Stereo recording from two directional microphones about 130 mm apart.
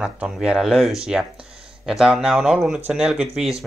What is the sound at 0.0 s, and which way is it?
Speech, 5° right (ahead or behind).